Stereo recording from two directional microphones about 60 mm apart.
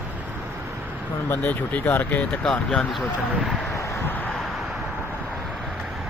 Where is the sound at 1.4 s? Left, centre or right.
Left.